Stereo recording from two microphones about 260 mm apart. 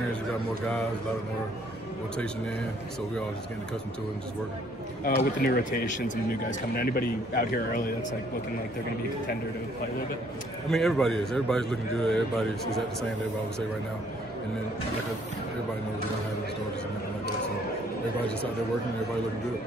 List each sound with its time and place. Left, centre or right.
5.0 s a man's voice: left
10.7 s a man's voice: centre